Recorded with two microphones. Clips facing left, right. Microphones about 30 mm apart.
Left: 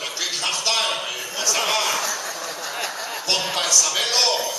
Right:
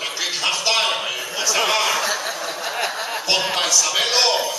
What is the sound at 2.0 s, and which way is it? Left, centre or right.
Chuckle, right.